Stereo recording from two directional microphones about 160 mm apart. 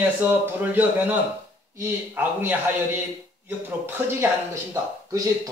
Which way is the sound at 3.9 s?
15° right (ahead or behind).